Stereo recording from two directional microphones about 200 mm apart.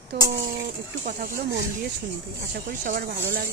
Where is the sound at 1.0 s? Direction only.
45° right (ahead or behind).